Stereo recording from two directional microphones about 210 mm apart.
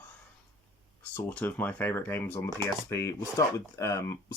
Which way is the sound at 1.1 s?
10° left (ahead or behind).